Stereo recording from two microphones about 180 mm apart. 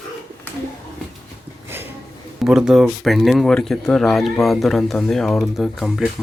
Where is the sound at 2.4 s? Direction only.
5° right (ahead or behind).